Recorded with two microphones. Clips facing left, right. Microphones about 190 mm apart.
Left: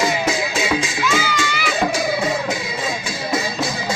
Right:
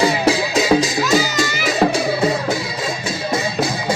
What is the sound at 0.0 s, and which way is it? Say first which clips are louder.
Music: right 4 dB; 35° right (ahead or behind).